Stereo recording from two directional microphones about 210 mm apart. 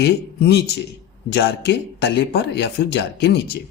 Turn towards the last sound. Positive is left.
turn(degrees=55)  # may be behind; listen again after turning